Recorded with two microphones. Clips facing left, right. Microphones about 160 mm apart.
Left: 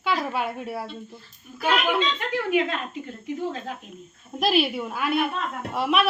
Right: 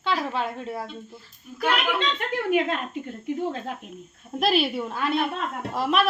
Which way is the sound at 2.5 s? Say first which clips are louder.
Right 1 dB; 45° right (ahead or behind).